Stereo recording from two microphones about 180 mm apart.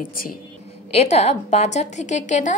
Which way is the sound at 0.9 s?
35° left (ahead or behind).